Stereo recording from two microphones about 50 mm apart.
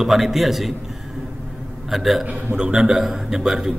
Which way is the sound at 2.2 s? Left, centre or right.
Centre.